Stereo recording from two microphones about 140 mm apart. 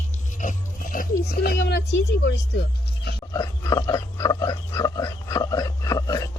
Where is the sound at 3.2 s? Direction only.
25° left (ahead or behind).